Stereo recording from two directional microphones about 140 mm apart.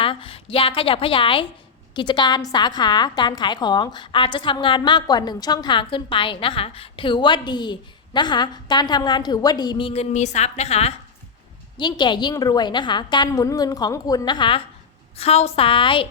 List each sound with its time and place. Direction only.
0.0 s a woman's voice: 40° left (ahead or behind)
11.8 s a woman's voice: 30° left (ahead or behind)
15.2 s a woman's voice: 45° left (ahead or behind)